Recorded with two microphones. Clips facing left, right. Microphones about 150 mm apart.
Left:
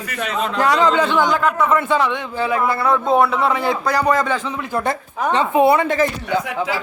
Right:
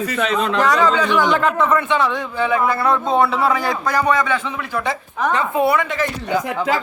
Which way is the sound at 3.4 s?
25° left (ahead or behind).